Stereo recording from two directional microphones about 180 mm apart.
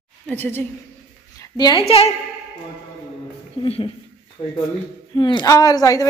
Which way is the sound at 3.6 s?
30° left (ahead or behind).